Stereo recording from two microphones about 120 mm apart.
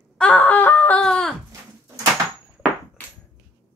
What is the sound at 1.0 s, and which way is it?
Fowl, 5° left (ahead or behind).